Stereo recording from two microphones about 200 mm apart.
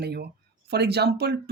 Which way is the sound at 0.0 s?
55° right (ahead or behind).